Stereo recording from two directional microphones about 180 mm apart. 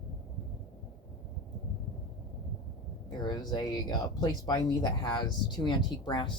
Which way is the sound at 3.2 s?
25° left (ahead or behind).